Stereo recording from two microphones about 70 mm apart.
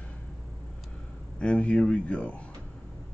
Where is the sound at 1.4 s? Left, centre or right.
Centre.